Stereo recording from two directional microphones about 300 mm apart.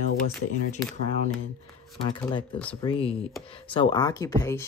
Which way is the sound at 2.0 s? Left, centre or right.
Centre.